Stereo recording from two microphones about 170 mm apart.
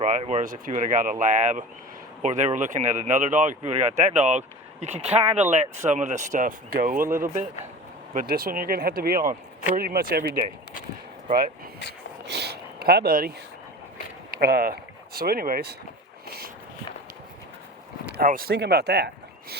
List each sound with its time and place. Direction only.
0.0 s speech: 40° right (ahead or behind); by 10.2 s 65° right (ahead or behind)
11.3 s speech: 50° right (ahead or behind)
12.2 s a sound: 75° right (ahead or behind)
14.3 s speech: 60° right (ahead or behind)
18.0 s speech: 55° right (ahead or behind); by 19.5 s 75° right (ahead or behind)